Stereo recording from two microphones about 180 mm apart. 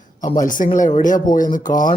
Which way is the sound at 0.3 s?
45° left (ahead or behind).